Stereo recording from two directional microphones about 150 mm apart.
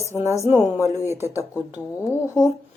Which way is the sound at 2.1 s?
20° left (ahead or behind).